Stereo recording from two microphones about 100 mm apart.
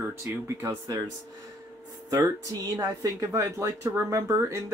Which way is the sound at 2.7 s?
35° right (ahead or behind).